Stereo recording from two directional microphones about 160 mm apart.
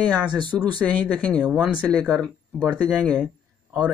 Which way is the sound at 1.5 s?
5° right (ahead or behind).